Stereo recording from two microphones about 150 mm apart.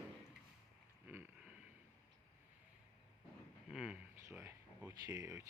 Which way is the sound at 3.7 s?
5° right (ahead or behind).